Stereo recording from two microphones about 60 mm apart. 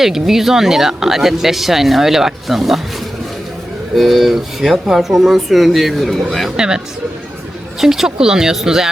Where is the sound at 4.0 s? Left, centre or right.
Centre.